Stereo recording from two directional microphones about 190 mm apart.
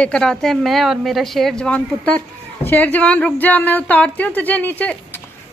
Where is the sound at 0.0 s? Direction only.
5° left (ahead or behind).